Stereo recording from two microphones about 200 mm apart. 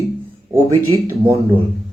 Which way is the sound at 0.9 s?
15° right (ahead or behind).